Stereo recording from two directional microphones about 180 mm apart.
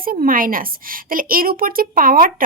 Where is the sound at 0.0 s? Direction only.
50° right (ahead or behind).